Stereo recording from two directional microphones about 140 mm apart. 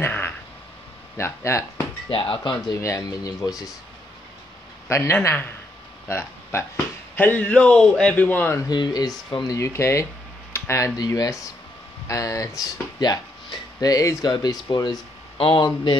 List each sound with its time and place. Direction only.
0.0 s a sound: 15° left (ahead or behind)
1.1 s speech: 20° left (ahead or behind)
2.0 s speech: 40° left (ahead or behind)
2.8 s speech: 20° left (ahead or behind)
4.8 s a man's voice: 20° left (ahead or behind)
8.6 s speech: 30° left (ahead or behind)
15.3 s speech: 40° left (ahead or behind)